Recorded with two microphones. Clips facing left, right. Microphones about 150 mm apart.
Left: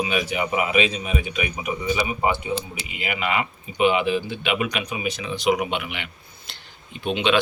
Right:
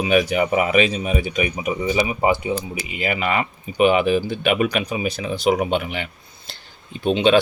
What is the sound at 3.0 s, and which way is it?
Speech, 45° right (ahead or behind).